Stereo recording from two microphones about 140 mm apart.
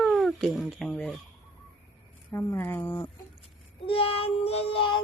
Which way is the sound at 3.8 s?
40° left (ahead or behind).